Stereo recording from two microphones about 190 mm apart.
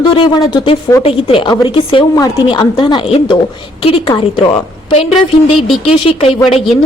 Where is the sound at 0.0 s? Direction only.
25° left (ahead or behind).